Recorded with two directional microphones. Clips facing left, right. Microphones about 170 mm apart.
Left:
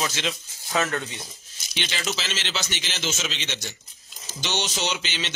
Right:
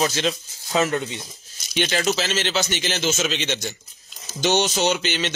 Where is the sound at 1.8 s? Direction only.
50° right (ahead or behind).